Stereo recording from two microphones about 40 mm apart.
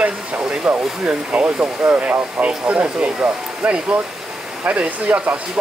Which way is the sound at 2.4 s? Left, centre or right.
Right.